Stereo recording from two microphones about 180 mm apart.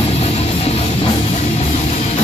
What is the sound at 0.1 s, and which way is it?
Music, 35° left (ahead or behind).